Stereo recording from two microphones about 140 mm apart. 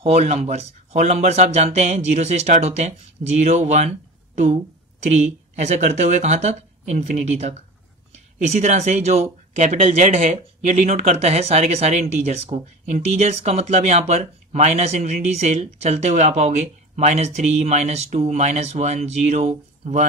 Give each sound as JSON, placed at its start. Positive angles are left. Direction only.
{"t": 0.0, "sound": "speech", "side_deg": -50}
{"t": 5.0, "sound": "speech", "side_deg": -55}